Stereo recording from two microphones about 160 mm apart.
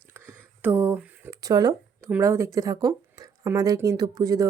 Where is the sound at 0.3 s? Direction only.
15° right (ahead or behind).